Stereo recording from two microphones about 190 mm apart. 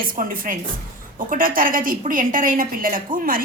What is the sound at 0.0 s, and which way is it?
A woman's voice, 50° right (ahead or behind).